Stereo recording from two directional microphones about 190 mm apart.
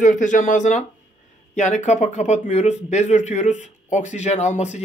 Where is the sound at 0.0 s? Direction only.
40° left (ahead or behind).